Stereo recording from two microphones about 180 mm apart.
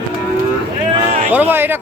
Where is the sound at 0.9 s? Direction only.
35° right (ahead or behind).